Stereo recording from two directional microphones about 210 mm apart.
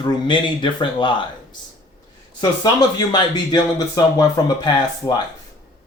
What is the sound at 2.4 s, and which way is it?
Speech, 20° left (ahead or behind).